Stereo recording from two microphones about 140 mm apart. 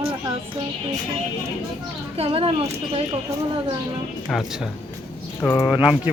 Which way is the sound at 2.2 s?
45° right (ahead or behind).